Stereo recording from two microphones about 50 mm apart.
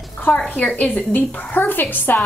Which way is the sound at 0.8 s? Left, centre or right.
Left.